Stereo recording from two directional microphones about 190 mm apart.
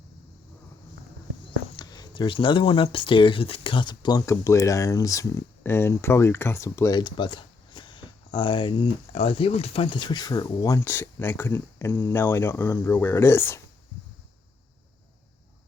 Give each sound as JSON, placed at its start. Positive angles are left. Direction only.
{"t": 1.7, "sound": "speech", "side_deg": 20}